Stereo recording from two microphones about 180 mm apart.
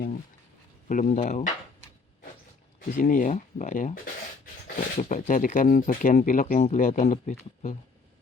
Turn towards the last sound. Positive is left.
turn(degrees=40)  # may be behind; listen again after turning